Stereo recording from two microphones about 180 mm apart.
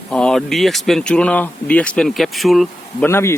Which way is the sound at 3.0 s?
15° left (ahead or behind).